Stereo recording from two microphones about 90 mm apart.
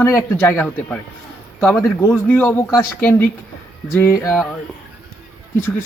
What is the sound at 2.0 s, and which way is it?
Speech, 25° left (ahead or behind).